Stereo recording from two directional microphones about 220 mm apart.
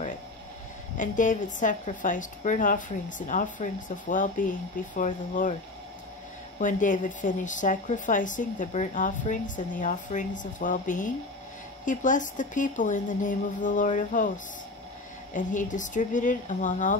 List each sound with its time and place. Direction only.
0.9 s a woman's voice: 35° left (ahead or behind)
6.6 s a woman's voice: 35° left (ahead or behind)